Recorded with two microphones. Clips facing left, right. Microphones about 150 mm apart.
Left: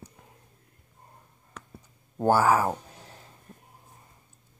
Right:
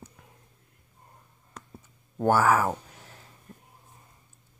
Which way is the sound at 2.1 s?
15° left (ahead or behind).